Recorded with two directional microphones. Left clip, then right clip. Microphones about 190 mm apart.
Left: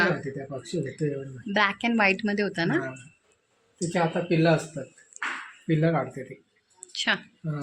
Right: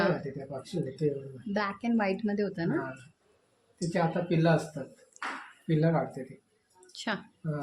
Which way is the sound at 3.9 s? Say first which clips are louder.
Left 4 dB; 35° left (ahead or behind).